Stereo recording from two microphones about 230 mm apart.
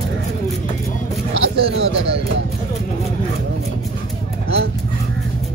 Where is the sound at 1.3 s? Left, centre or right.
Right.